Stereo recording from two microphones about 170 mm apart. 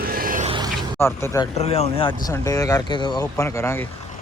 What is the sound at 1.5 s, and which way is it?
Speech, 40° left (ahead or behind).